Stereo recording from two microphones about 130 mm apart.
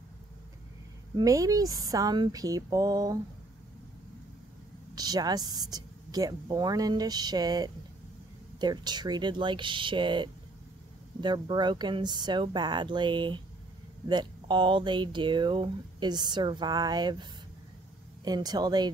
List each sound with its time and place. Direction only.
1.1 s speech: 25° right (ahead or behind)
4.9 s speech: 30° right (ahead or behind)